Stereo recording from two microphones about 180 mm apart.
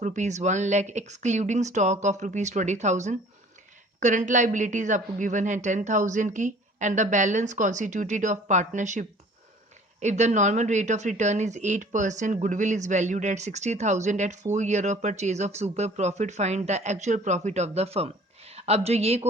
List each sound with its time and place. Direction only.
0.0 s a woman's voice: 40° right (ahead or behind)